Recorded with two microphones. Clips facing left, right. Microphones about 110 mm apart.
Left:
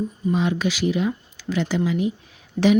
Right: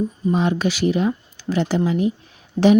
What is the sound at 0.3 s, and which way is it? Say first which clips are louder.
Speech: right 2 dB; 40° right (ahead or behind).